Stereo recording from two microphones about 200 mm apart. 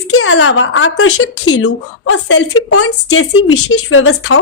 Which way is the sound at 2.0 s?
65° left (ahead or behind).